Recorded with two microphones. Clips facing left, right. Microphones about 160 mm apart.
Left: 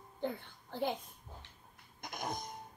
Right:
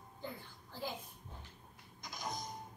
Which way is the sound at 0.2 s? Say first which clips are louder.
Left 8 dB; 60° left (ahead or behind).